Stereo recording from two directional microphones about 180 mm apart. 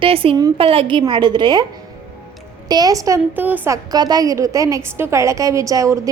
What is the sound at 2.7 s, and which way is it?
A woman's voice, 20° right (ahead or behind).